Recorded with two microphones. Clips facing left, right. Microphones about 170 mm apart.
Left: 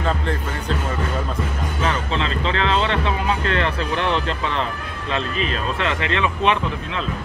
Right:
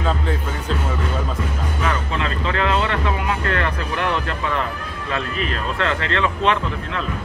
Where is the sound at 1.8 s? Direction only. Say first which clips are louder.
Left 1 dB; 25° left (ahead or behind).